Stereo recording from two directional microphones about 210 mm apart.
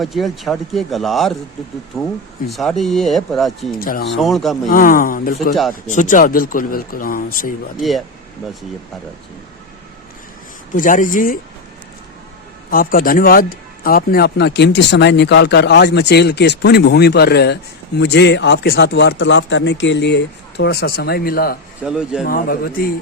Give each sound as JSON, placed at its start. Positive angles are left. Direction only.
{"t": 0.0, "sound": "speech", "side_deg": 0}
{"t": 3.8, "sound": "speech", "side_deg": 45}
{"t": 4.1, "sound": "speech", "side_deg": 0}
{"t": 4.7, "sound": "speech", "side_deg": 40}
{"t": 5.3, "sound": "speech", "side_deg": 0}
{"t": 5.9, "sound": "speech", "side_deg": 35}
{"t": 7.8, "sound": "speech", "side_deg": 0}
{"t": 10.8, "sound": "speech", "side_deg": 40}
{"t": 12.7, "sound": "speech", "side_deg": 40}
{"t": 21.8, "sound": "speech", "side_deg": -5}
{"t": 22.3, "sound": "speech", "side_deg": 45}